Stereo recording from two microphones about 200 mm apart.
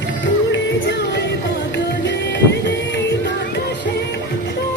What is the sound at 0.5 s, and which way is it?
Music, 60° left (ahead or behind).